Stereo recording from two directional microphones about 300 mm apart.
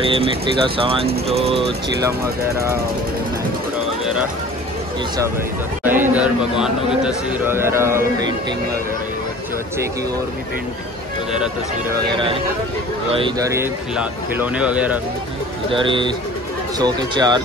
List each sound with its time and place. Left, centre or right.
0.0 s a man's voice: centre
5.9 s a man's voice: centre
13.1 s speech: centre
15.7 s a man's voice: centre